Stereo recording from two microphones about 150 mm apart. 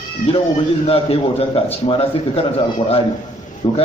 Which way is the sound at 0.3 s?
40° left (ahead or behind).